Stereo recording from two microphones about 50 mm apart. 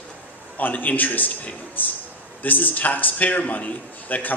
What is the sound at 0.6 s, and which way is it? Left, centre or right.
Speech, left.